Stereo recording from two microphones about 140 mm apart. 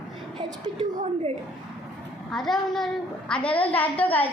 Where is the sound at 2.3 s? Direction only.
Centre (ahead or behind).